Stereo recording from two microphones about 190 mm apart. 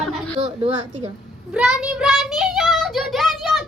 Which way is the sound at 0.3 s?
35° right (ahead or behind).